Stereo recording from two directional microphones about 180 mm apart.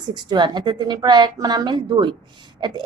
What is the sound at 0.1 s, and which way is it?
A woman's voice, 25° right (ahead or behind).